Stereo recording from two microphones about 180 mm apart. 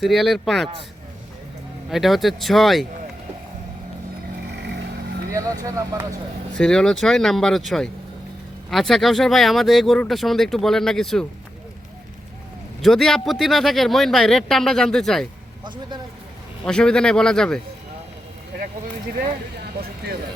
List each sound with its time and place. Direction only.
0.0 s speech: centre (ahead or behind)
1.9 s speech: centre (ahead or behind)
4.5 s vehicle: 70° right (ahead or behind)
5.3 s speech: 20° right (ahead or behind)
6.5 s speech: 5° left (ahead or behind)
12.8 s speech: centre (ahead or behind)
15.6 s speech: 25° right (ahead or behind)
16.6 s speech: 5° left (ahead or behind)